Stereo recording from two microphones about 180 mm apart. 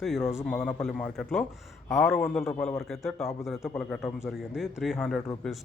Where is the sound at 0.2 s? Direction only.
15° left (ahead or behind).